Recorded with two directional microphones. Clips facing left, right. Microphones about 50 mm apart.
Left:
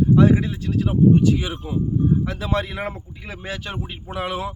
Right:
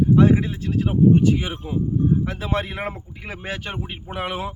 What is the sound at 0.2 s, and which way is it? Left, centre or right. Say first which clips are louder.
Speech: even; centre.